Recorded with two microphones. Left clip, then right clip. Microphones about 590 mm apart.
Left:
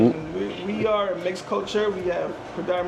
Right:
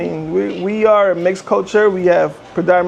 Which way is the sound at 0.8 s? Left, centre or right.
Right.